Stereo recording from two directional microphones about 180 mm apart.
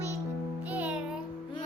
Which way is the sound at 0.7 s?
10° right (ahead or behind).